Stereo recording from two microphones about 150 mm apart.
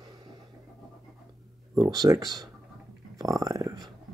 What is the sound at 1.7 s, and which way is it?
Speech, 25° right (ahead or behind).